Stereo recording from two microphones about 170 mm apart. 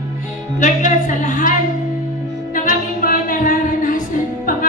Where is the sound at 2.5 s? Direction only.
55° left (ahead or behind).